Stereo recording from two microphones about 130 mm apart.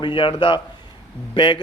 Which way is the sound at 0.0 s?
40° left (ahead or behind).